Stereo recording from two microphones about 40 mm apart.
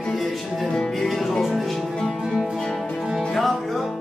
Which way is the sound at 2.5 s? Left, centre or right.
Centre.